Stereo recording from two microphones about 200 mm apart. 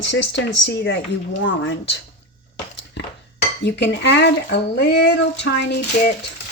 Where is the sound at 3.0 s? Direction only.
60° left (ahead or behind).